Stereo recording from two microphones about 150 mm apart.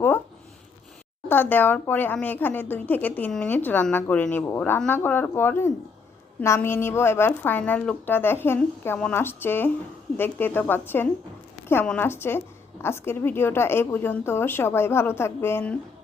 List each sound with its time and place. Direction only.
1.3 s speech: 15° left (ahead or behind)